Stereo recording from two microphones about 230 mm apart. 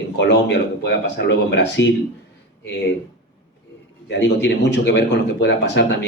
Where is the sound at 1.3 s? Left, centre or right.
Left.